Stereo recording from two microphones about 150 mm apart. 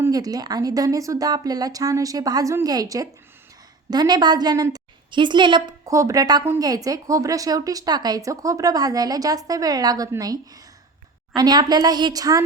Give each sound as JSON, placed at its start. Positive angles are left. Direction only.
{"t": 0.0, "sound": "a woman's voice", "side_deg": -25}